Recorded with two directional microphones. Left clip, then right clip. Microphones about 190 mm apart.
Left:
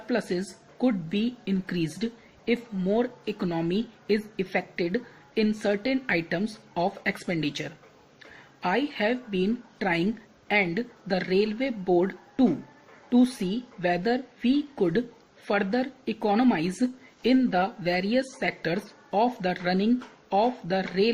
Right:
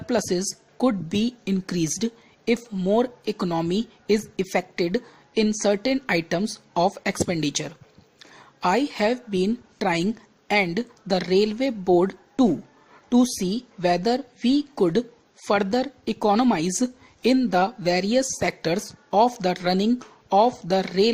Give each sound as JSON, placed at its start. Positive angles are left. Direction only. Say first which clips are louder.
{"t": 0.1, "sound": "a woman's voice", "louder": "right 5 dB", "side_deg": -50}